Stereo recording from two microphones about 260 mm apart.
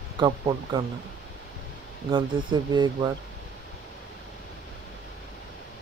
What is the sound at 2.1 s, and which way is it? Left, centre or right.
Speech, centre.